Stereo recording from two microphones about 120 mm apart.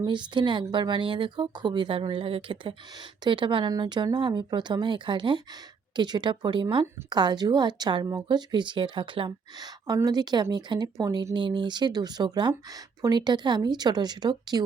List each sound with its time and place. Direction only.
0.0 s speech: 40° right (ahead or behind)
9.8 s speech: 30° right (ahead or behind)